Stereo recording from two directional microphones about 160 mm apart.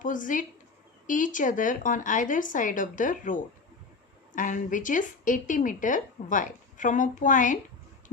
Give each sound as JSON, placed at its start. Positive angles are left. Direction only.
{"t": 0.0, "sound": "a woman's voice", "side_deg": 55}